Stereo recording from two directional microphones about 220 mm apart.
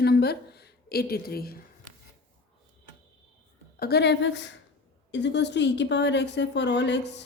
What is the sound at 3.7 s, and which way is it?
A woman's voice, 45° left (ahead or behind).